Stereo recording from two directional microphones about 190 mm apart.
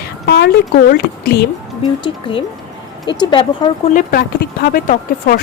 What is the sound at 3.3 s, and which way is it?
Speech, 25° left (ahead or behind).